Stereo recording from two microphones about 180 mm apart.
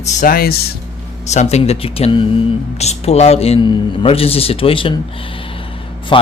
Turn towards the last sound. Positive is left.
turn(degrees=30)  # may be behind; listen again after turning